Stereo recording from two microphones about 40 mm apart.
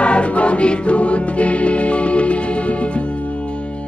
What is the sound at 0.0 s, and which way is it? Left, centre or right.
Music, left.